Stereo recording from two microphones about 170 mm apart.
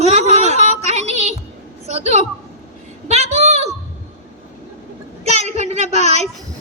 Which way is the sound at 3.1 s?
40° right (ahead or behind).